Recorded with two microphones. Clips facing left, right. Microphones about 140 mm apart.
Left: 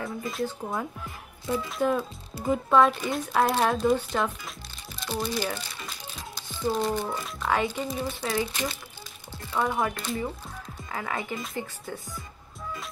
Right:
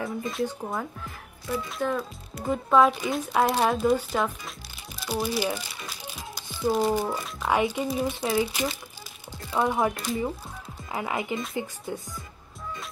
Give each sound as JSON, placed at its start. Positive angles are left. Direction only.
{"t": 0.0, "sound": "speech", "side_deg": 0}